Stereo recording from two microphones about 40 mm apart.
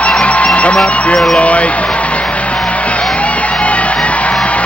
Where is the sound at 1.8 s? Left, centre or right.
Left.